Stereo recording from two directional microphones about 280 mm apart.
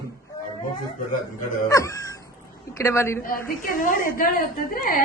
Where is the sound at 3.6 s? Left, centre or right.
Left.